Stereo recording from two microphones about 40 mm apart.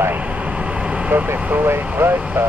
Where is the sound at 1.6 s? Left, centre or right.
Right.